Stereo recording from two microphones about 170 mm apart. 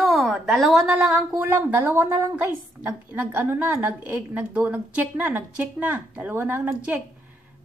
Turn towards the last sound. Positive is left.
turn(degrees=-10)  # may be behind; listen again after turning